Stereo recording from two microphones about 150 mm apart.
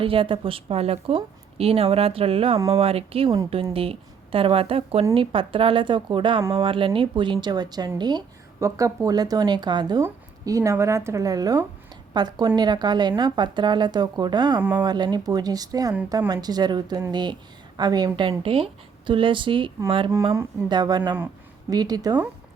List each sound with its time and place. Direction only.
0.0 s a woman's voice: 35° right (ahead or behind)